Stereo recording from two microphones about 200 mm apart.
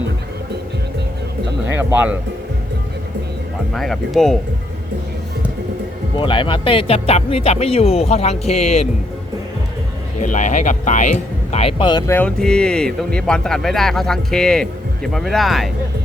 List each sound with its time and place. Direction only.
1.6 s speech: 10° right (ahead or behind)
3.8 s speech: centre (ahead or behind)
6.1 s speech: 25° left (ahead or behind)
10.2 s speech: 40° left (ahead or behind)
11.5 s speech: 25° left (ahead or behind)
12.1 s speech: 5° left (ahead or behind)